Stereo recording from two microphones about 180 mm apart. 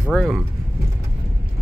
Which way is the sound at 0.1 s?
Centre (ahead or behind).